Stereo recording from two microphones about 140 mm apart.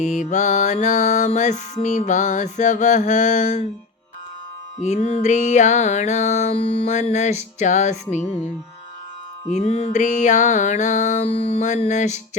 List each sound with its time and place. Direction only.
0.0 s mantra: 60° left (ahead or behind)
4.8 s mantra: 55° left (ahead or behind)
9.5 s mantra: 55° left (ahead or behind)